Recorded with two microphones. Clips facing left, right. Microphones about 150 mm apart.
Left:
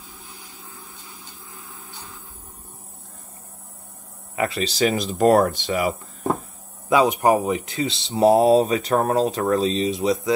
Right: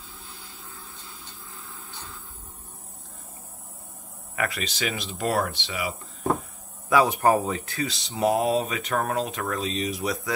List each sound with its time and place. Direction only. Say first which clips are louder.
0.3 s a sound: left 2 dB; 15° left (ahead or behind)
4.4 s speech: left 8 dB; 30° left (ahead or behind); by 5.9 s 45° left (ahead or behind)
6.9 s speech: left 3 dB; 20° left (ahead or behind)